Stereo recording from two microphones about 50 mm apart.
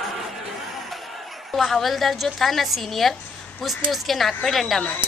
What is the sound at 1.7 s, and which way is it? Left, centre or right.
A woman's voice, centre.